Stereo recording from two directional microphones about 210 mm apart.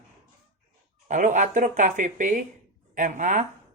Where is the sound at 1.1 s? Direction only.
35° right (ahead or behind).